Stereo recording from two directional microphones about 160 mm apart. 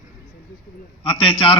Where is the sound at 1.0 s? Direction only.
35° left (ahead or behind).